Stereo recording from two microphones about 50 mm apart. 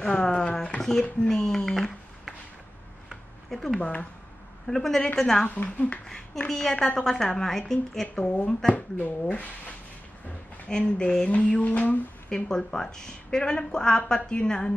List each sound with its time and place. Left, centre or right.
0.2 s a sound: centre
1.2 s a woman's voice: centre
3.1 s a sound: centre
3.8 s mantra: left
4.6 s a woman's voice: centre
5.5 s speech: left
6.0 s a woman's voice: centre
8.7 s speech: left
10.7 s mantra: left
12.3 s a woman's voice: centre